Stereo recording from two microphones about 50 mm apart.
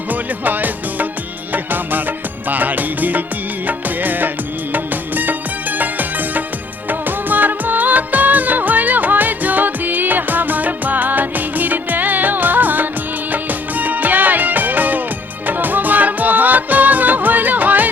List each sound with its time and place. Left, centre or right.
0.1 s music: right